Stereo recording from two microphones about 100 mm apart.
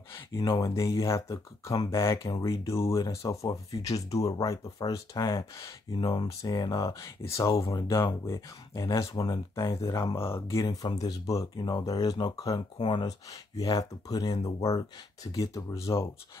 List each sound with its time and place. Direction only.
0.5 s speech: 35° left (ahead or behind)
5.9 s speech: 50° left (ahead or behind)
10.1 s speech: 25° left (ahead or behind)